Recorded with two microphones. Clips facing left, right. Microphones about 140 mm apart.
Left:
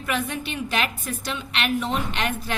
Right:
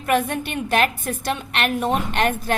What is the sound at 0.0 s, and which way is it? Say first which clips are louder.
A woman's voice: right 6 dB; 55° right (ahead or behind).